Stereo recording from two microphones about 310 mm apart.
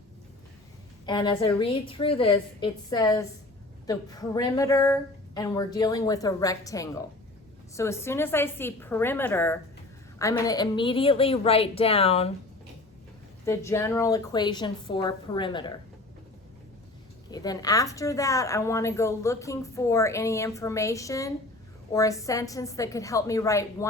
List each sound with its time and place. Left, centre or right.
1.0 s a woman's voice: centre
13.4 s a woman's voice: centre
17.3 s a woman's voice: centre